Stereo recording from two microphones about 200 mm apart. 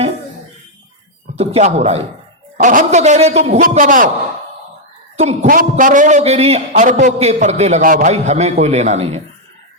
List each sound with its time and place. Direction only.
1.4 s a man's voice: 35° right (ahead or behind)
5.1 s a man's voice: 30° right (ahead or behind)